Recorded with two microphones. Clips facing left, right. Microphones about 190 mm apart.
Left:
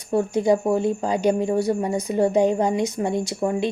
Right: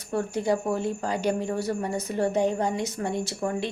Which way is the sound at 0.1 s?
15° left (ahead or behind).